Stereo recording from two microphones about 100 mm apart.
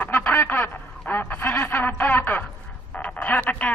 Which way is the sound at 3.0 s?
15° left (ahead or behind).